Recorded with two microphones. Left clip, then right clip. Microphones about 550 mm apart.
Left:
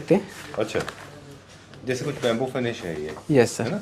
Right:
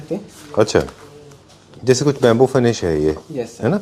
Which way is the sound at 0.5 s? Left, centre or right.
Right.